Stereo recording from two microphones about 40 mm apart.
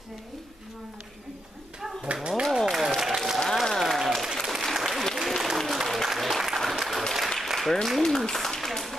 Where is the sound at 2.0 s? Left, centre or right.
Right.